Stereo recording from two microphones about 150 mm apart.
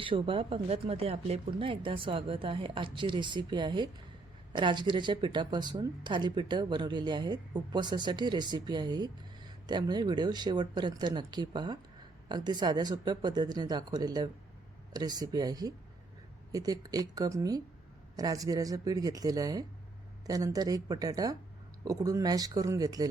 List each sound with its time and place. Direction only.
0.0 s speech: 35° right (ahead or behind)